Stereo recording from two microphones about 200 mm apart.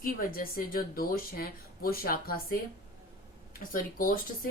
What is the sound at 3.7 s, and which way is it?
Speech, 45° left (ahead or behind).